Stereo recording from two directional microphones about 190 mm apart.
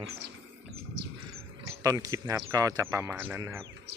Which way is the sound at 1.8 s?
15° right (ahead or behind).